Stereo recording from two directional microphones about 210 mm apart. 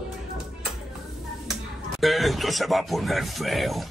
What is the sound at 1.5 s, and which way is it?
Speech, centre (ahead or behind).